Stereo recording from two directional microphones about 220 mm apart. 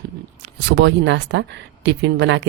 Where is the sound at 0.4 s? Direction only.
55° right (ahead or behind).